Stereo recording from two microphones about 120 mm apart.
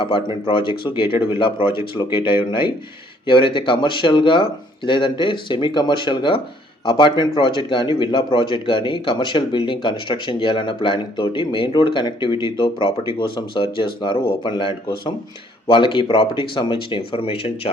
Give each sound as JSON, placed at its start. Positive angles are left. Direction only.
{"t": 0.4, "sound": "speech", "side_deg": 45}